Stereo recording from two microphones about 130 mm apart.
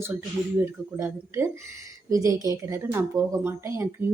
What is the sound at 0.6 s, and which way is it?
Speech, 20° right (ahead or behind).